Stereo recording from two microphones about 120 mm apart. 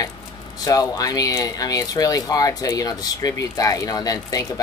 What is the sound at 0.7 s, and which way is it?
Speech, 30° left (ahead or behind).